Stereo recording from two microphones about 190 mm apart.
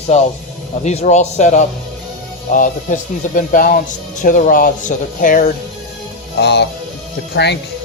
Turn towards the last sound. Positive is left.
turn(degrees=60)  # may be behind; listen again after turning